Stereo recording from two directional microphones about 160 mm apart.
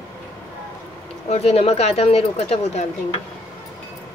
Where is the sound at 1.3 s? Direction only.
40° left (ahead or behind).